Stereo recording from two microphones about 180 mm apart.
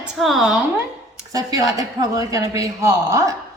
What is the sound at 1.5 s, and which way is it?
A man's voice, 20° right (ahead or behind).